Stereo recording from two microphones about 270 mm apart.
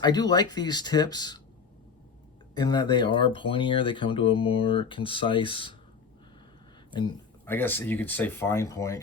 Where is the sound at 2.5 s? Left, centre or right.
Centre.